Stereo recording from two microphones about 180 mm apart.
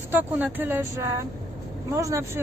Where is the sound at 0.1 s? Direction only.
10° right (ahead or behind).